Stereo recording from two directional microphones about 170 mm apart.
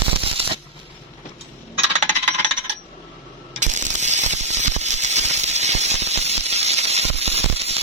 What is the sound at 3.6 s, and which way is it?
Mechanisms, 45° right (ahead or behind).